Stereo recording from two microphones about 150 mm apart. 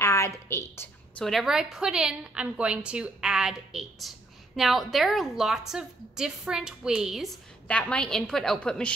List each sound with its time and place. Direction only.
0.0 s a sound: 20° left (ahead or behind)
1.2 s a woman's voice: centre (ahead or behind)
7.6 s a woman's voice: 5° left (ahead or behind)